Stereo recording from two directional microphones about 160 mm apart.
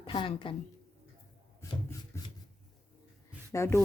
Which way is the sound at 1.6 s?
15° left (ahead or behind).